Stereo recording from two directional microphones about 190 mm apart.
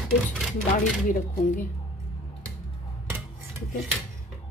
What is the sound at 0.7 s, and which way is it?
Speech, 40° left (ahead or behind).